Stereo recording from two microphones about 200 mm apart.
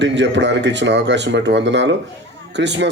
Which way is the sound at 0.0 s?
60° right (ahead or behind).